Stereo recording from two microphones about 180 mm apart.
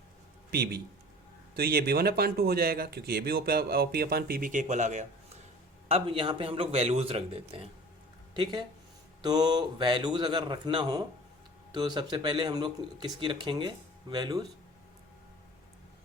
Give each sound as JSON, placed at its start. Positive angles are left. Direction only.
{"t": 0.5, "sound": "speech", "side_deg": -60}
{"t": 5.9, "sound": "speech", "side_deg": -30}